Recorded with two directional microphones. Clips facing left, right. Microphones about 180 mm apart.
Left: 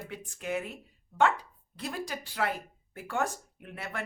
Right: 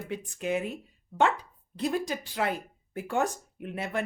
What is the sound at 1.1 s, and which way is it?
Speech, centre (ahead or behind).